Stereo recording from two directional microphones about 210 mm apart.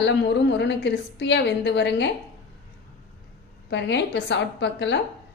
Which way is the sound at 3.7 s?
55° left (ahead or behind).